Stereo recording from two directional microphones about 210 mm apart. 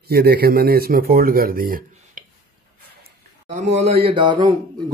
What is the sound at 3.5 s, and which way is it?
Speech, 35° right (ahead or behind).